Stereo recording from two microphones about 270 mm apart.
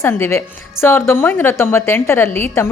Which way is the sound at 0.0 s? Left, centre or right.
Centre.